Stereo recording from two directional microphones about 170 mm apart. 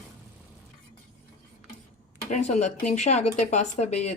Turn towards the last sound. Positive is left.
turn(degrees=40)  # may be behind; listen again after turning